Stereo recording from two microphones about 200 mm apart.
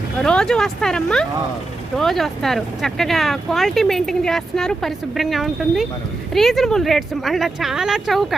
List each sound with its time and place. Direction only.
0.2 s speech: 5° left (ahead or behind)